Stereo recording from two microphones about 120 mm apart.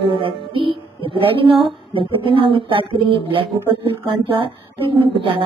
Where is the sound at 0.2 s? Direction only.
45° right (ahead or behind).